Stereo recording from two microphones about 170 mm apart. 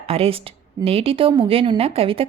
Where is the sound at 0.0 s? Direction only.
35° right (ahead or behind).